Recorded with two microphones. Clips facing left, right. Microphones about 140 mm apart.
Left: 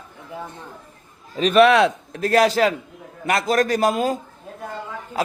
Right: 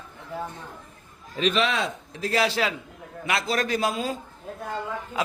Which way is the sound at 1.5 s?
70° left (ahead or behind).